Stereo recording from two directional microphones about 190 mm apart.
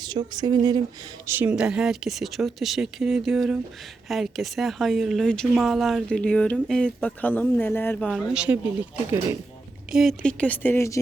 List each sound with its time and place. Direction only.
0.0 s speech: 25° right (ahead or behind)
1.3 s speech: 10° right (ahead or behind)
9.9 s speech: centre (ahead or behind)